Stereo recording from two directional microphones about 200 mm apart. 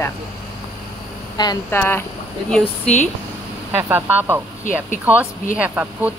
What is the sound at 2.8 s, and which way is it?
Speech, 35° left (ahead or behind).